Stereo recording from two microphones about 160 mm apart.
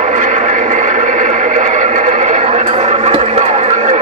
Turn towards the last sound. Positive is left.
turn(degrees=-40)  # may be behind; listen again after turning